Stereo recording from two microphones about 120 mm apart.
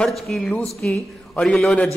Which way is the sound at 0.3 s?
10° left (ahead or behind).